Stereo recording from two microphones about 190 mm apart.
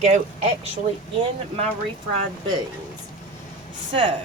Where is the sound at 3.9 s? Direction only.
25° right (ahead or behind).